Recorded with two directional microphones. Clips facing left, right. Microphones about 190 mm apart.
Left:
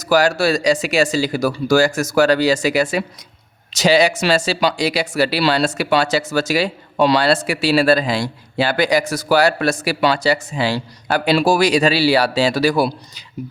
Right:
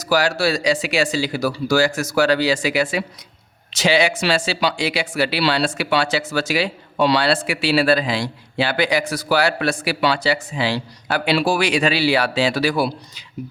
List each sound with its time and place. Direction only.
0.0 s speech: 45° left (ahead or behind)